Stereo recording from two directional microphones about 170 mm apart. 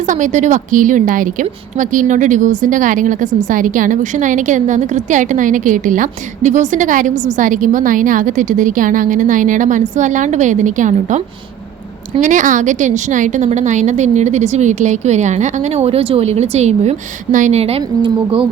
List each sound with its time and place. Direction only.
0.1 s a woman's voice: 45° right (ahead or behind)
12.2 s a woman's voice: 50° right (ahead or behind); by 18.4 s 30° right (ahead or behind)